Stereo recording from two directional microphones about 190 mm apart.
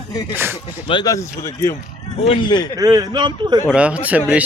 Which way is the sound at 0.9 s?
20° left (ahead or behind).